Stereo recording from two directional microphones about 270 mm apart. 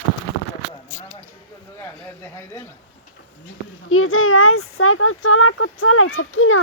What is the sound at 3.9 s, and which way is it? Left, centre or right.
Speech, left.